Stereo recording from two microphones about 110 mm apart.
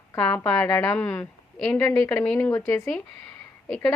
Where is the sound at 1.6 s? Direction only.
5° left (ahead or behind).